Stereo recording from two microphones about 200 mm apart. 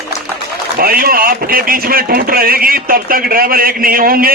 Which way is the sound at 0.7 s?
45° right (ahead or behind).